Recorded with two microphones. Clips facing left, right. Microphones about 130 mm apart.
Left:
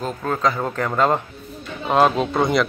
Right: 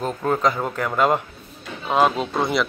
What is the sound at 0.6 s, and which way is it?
Speech, 5° right (ahead or behind).